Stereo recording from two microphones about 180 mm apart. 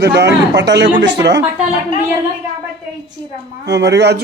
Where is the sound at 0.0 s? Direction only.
70° right (ahead or behind).